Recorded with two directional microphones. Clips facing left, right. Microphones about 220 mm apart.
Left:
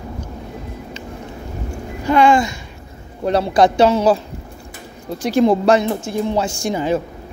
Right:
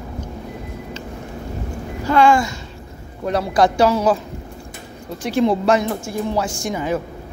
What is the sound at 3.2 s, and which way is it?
Speech, 25° left (ahead or behind).